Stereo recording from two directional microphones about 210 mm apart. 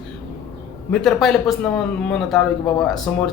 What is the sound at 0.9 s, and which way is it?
Speech, 5° left (ahead or behind).